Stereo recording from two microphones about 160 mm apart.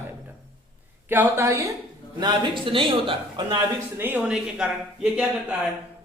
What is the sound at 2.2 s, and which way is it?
A man's voice, 30° right (ahead or behind).